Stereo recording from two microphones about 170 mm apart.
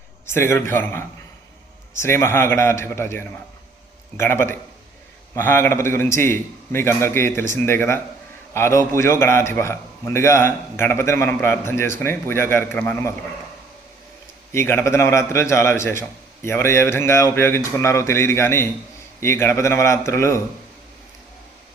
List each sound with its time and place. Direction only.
0.3 s a man's voice: 15° left (ahead or behind)
14.5 s a man's voice: 15° left (ahead or behind)